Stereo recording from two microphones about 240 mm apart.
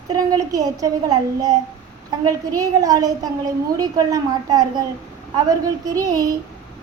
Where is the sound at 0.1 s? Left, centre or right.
Centre.